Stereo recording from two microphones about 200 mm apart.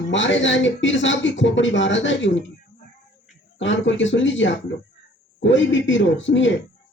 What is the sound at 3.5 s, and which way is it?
Speech, 65° left (ahead or behind).